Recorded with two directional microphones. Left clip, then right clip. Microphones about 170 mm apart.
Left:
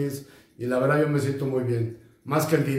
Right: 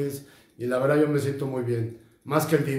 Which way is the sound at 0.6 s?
25° right (ahead or behind).